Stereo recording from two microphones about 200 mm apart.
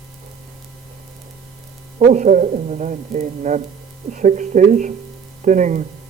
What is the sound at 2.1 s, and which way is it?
Speech, 40° right (ahead or behind).